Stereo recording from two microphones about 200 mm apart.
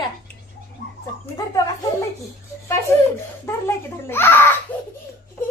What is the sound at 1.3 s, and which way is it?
Speech, 20° left (ahead or behind).